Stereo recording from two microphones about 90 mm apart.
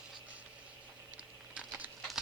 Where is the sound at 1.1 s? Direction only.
15° right (ahead or behind).